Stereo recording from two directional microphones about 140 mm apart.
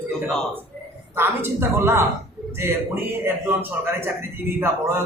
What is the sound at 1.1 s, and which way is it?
A man's voice, 15° right (ahead or behind).